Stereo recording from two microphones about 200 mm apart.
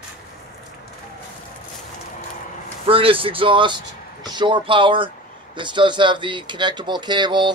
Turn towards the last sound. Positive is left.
turn(degrees=-20)  # may be behind; listen again after turning